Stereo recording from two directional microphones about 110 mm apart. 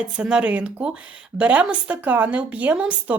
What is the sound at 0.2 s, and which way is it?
A woman's voice, 10° right (ahead or behind).